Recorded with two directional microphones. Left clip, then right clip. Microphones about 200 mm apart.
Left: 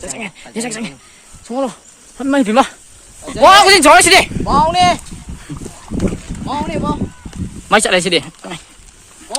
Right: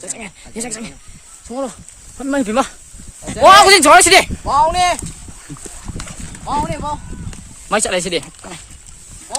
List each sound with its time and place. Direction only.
0.0 s speech: 10° right (ahead or behind)
4.4 s speech: 50° right (ahead or behind)
6.5 s speech: 40° right (ahead or behind)
7.7 s speech: centre (ahead or behind)